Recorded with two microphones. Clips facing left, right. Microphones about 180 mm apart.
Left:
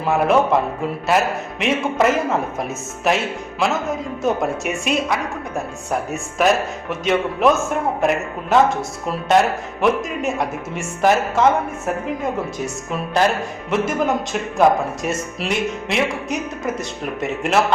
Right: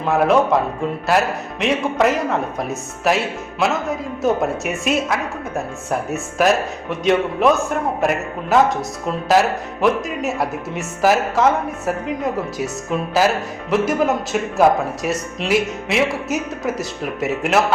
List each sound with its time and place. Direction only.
0.0 s a man's voice: centre (ahead or behind)